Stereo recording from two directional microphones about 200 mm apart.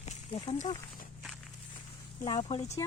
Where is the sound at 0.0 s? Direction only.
25° left (ahead or behind).